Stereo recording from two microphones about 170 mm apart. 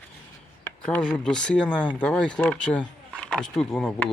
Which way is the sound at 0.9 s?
5° left (ahead or behind).